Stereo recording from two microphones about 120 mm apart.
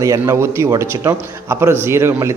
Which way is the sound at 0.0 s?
25° right (ahead or behind).